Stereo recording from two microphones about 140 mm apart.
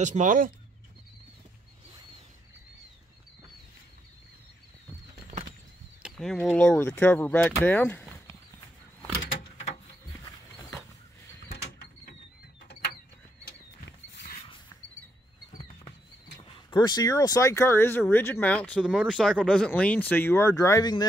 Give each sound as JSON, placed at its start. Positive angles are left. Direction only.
{"t": 0.0, "sound": "speech", "side_deg": -65}
{"t": 6.0, "sound": "speech", "side_deg": 5}
{"t": 16.4, "sound": "speech", "side_deg": 35}